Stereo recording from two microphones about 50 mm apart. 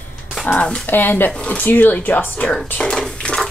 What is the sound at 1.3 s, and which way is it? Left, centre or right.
Speech, left.